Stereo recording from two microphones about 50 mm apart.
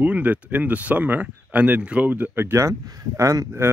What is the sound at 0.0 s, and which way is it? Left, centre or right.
Speech, right.